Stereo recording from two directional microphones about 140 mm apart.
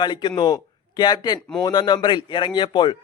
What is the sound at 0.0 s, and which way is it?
A man's voice, 30° left (ahead or behind).